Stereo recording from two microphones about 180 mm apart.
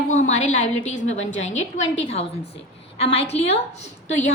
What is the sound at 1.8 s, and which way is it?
Speech, 90° left.